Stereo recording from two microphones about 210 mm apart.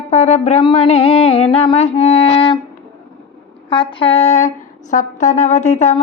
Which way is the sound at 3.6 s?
25° left (ahead or behind).